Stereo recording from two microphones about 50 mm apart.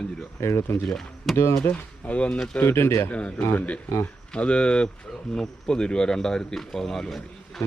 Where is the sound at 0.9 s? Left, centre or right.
Centre.